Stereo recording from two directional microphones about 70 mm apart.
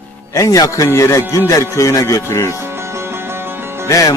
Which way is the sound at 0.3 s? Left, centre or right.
Left.